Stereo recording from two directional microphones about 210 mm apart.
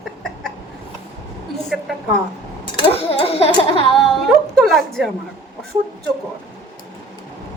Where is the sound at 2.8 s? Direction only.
25° left (ahead or behind).